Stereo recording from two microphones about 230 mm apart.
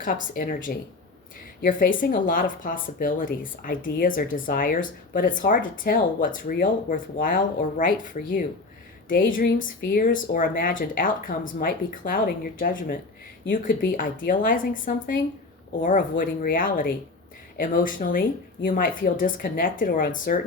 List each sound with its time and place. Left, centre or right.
0.0 s speech: left